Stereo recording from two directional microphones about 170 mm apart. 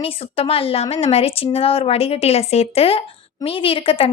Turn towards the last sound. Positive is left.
turn(degrees=30)  # may be behind; listen again after turning